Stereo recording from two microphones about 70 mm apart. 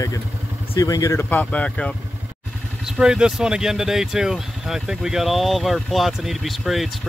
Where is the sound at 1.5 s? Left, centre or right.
Centre.